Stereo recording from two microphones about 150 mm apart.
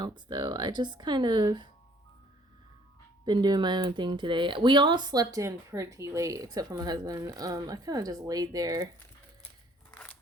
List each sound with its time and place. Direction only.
0.0 s speech: 30° right (ahead or behind)
3.2 s speech: 30° right (ahead or behind)
9.9 s scissors: 10° left (ahead or behind)